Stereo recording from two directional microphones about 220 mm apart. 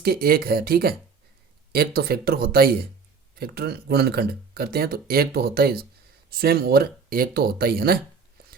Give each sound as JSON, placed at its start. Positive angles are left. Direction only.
{"t": 0.0, "sound": "speech", "side_deg": -45}